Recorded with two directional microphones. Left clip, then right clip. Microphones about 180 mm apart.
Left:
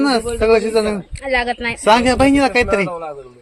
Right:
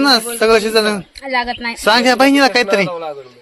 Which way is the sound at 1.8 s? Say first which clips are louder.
Right 1 dB; 10° left (ahead or behind).